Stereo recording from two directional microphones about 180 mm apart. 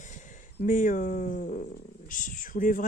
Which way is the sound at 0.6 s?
45° left (ahead or behind).